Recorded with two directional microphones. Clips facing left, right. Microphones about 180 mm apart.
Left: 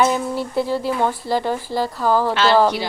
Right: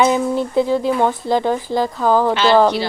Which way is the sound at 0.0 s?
20° right (ahead or behind).